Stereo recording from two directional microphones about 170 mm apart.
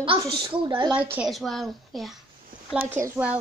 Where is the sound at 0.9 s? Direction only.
10° right (ahead or behind).